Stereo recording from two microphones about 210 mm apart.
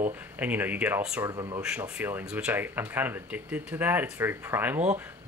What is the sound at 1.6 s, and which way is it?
Speech, 5° right (ahead or behind).